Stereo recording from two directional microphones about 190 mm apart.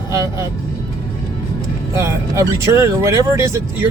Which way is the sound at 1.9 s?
15° right (ahead or behind).